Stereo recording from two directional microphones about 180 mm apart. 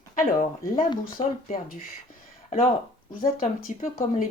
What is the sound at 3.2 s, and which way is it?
A woman's voice, 45° left (ahead or behind).